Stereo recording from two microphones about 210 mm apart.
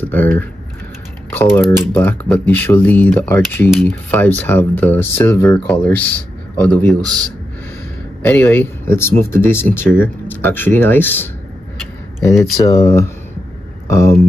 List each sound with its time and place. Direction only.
0.0 s speech: 10° left (ahead or behind)
1.3 s typing: 10° left (ahead or behind)
1.9 s speech: 10° left (ahead or behind)
12.5 s speech: 15° left (ahead or behind)